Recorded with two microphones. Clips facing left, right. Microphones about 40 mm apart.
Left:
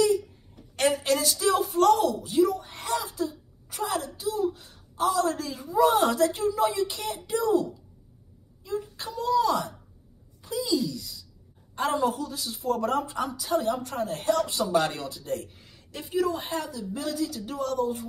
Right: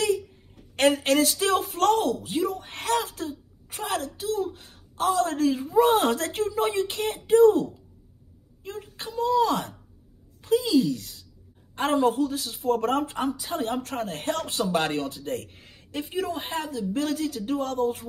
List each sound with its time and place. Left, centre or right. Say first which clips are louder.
0.7 s a woman's voice: right 4 dB; right
8.9 s speech: right 2 dB; right